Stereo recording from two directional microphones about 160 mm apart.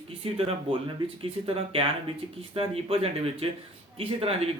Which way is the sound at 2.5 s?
35° right (ahead or behind).